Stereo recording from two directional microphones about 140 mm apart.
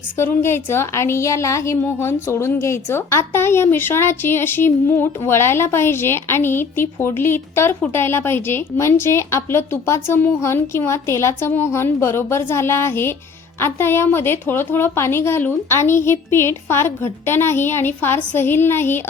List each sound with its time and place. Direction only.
0.2 s a woman's voice: 15° left (ahead or behind)